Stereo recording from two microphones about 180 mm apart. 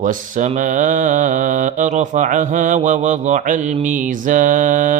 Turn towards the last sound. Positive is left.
turn(degrees=-45)  # may be behind; listen again after turning